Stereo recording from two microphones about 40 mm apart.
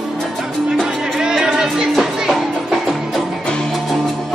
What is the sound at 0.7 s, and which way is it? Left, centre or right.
Music, centre.